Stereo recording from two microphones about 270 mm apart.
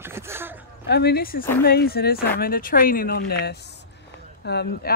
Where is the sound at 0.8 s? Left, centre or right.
Left.